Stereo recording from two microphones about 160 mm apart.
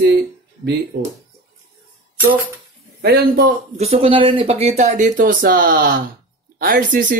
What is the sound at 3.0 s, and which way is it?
Speech, 65° right (ahead or behind).